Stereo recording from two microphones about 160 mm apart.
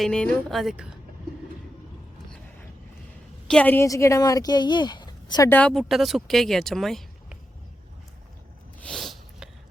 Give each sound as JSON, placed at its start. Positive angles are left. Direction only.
{"t": 0.0, "sound": "speech", "side_deg": 5}
{"t": 3.4, "sound": "speech", "side_deg": 5}
{"t": 5.5, "sound": "speech", "side_deg": 10}
{"t": 8.8, "sound": "a sound", "side_deg": 0}